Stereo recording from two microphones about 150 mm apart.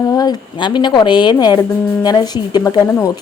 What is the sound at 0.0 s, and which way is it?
A woman's voice, 25° left (ahead or behind).